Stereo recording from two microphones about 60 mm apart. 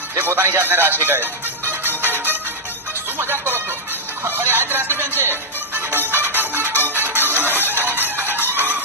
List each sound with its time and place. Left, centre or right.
0.2 s speech: right
2.0 s music: right
8.5 s chicken: right